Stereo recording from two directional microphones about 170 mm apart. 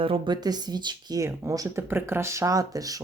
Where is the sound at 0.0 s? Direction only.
30° right (ahead or behind).